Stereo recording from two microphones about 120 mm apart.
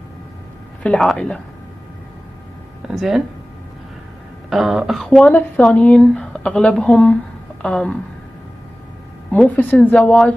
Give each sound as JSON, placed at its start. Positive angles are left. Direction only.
{"t": 0.8, "sound": "a woman's voice", "side_deg": 10}
{"t": 2.9, "sound": "speech", "side_deg": 0}
{"t": 4.5, "sound": "a woman's voice", "side_deg": -5}
{"t": 9.3, "sound": "a woman's voice", "side_deg": 15}